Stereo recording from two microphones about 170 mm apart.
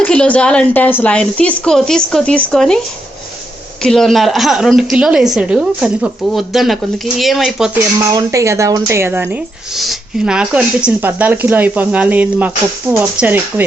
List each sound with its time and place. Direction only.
0.0 s a woman's voice: 5° left (ahead or behind)
3.8 s a woman's voice: centre (ahead or behind)
7.9 s speech: 20° right (ahead or behind)
9.7 s speech: 5° right (ahead or behind)